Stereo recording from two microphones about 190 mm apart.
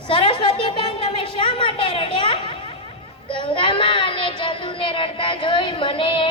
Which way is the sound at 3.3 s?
25° left (ahead or behind).